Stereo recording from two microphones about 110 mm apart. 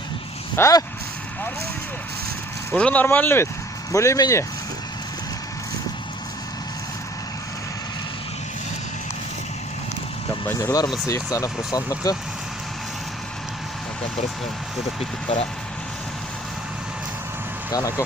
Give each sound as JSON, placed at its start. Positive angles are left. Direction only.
{"t": 0.5, "sound": "speech", "side_deg": 30}
{"t": 2.7, "sound": "speech", "side_deg": 10}
{"t": 10.4, "sound": "speech", "side_deg": 25}
{"t": 17.7, "sound": "speech", "side_deg": 30}